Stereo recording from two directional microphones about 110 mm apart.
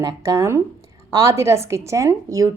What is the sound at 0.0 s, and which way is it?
A woman's voice, 30° right (ahead or behind).